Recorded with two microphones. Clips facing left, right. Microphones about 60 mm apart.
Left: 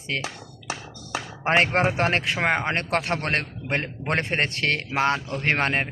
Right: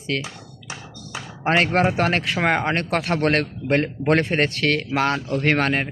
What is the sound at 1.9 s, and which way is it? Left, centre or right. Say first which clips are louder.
A man's voice: right 2 dB; left.